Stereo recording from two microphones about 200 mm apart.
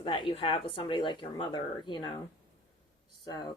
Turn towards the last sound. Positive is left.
turn(degrees=20)  # may be behind; listen again after turning